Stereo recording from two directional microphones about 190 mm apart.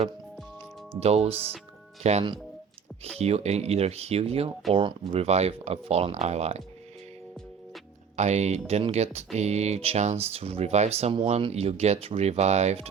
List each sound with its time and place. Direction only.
0.9 s speech: 35° right (ahead or behind)
8.1 s speech: 35° right (ahead or behind)